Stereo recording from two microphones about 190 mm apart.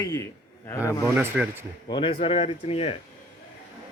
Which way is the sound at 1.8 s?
25° left (ahead or behind).